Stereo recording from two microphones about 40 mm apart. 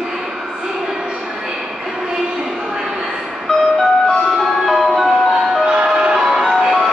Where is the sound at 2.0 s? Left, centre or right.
Centre.